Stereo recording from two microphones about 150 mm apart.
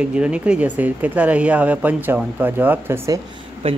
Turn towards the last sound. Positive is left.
turn(degrees=-40)  # may be behind; listen again after turning